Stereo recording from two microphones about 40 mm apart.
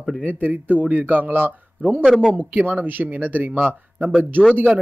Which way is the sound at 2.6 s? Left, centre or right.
Right.